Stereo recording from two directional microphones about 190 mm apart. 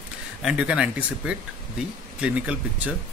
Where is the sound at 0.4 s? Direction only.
5° right (ahead or behind).